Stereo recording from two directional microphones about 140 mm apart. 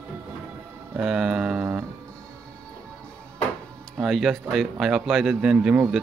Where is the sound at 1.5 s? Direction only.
15° right (ahead or behind).